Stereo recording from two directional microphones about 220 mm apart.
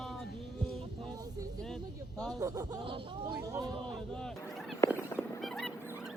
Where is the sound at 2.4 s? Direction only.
15° right (ahead or behind).